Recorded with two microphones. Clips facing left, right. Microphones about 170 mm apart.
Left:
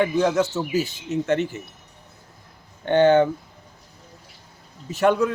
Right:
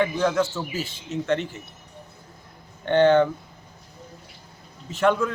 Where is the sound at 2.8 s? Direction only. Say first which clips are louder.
Left 1 dB; 15° left (ahead or behind).